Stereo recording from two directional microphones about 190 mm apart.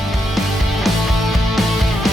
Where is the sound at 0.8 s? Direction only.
Centre (ahead or behind).